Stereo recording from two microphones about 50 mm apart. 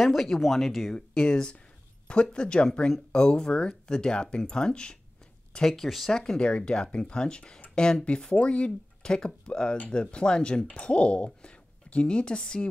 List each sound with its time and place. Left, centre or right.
0.0 s speech: centre
6.1 s speech: centre